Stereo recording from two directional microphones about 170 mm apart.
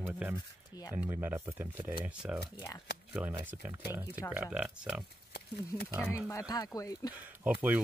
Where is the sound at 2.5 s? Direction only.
20° left (ahead or behind).